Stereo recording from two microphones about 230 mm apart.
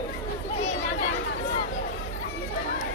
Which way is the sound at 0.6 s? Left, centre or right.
Left.